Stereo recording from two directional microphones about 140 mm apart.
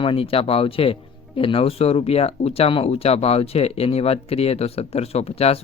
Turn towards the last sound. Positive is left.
turn(degrees=45)  # may be behind; listen again after turning